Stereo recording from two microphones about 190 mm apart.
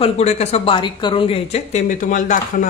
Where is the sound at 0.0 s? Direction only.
35° left (ahead or behind).